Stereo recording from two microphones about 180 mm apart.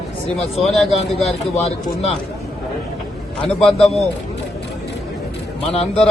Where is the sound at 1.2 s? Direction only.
35° left (ahead or behind).